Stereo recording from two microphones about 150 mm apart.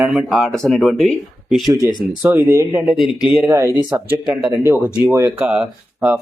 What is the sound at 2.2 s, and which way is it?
Speech, 10° right (ahead or behind).